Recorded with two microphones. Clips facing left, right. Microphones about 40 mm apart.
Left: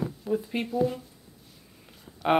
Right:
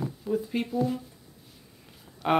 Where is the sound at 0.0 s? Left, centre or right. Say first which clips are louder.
Left 1 dB; centre.